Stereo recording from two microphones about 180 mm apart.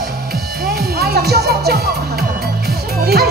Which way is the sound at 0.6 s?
60° right (ahead or behind).